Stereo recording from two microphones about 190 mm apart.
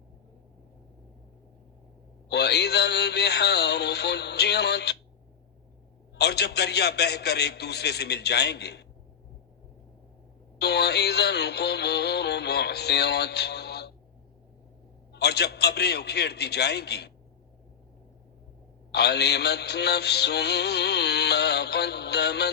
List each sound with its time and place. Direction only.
2.3 s music: 60° left (ahead or behind)
6.1 s music: 60° left (ahead or behind)
10.6 s music: 60° left (ahead or behind)
15.1 s music: 60° left (ahead or behind)
18.9 s music: 60° left (ahead or behind)